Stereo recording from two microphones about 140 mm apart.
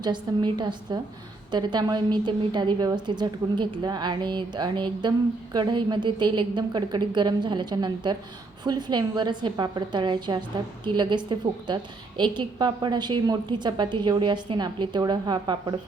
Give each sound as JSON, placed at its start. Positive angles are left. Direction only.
{"t": 0.0, "sound": "a woman's voice", "side_deg": -30}